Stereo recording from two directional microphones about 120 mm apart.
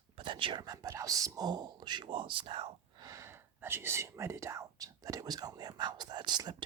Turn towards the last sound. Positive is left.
turn(degrees=-40)  # may be behind; listen again after turning